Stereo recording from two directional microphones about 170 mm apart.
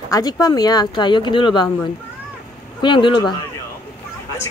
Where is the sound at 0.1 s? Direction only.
20° left (ahead or behind).